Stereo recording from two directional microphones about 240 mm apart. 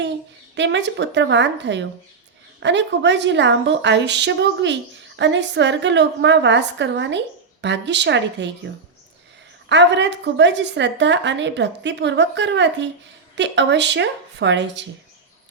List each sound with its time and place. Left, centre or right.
0.5 s a woman's voice: right